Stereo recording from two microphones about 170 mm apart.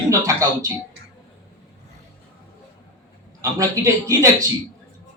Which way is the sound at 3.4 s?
20° right (ahead or behind).